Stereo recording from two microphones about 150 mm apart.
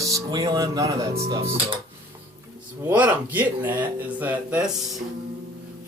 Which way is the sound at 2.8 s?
10° right (ahead or behind).